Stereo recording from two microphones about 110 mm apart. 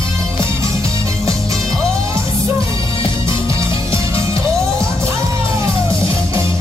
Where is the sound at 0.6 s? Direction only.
30° right (ahead or behind).